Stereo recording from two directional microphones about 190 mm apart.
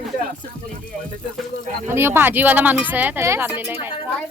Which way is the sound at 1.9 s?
10° right (ahead or behind).